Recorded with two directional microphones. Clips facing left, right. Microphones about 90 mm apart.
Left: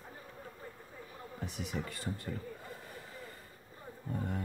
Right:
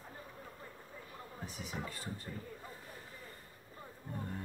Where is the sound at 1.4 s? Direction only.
90° left.